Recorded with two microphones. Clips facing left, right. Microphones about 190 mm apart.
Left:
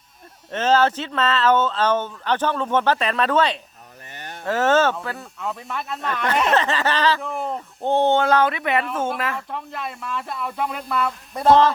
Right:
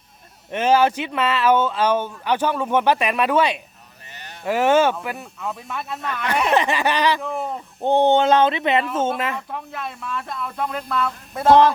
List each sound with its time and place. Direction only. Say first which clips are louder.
0.5 s speech: right 1 dB; 10° right (ahead or behind)
4.1 s a sound: left 4 dB; 50° left (ahead or behind)
4.4 s speech: right 1 dB; 15° right (ahead or behind)
5.4 s speech: left 3 dB; 5° right (ahead or behind); by 9.4 s 20° right (ahead or behind)
9.5 s speech: even; centre (ahead or behind)